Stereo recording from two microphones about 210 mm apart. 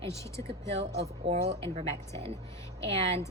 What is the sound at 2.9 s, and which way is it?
Speech, 30° right (ahead or behind).